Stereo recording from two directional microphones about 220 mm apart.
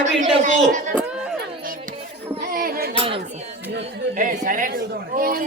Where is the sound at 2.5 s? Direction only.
40° right (ahead or behind).